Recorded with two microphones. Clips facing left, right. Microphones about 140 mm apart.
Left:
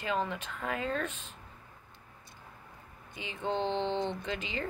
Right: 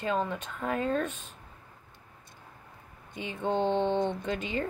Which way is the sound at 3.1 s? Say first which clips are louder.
Right 5 dB; 50° right (ahead or behind).